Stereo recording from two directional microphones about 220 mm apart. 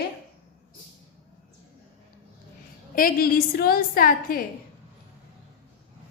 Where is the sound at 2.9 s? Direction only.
40° left (ahead or behind).